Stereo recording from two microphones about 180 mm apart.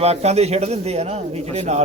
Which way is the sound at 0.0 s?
35° right (ahead or behind).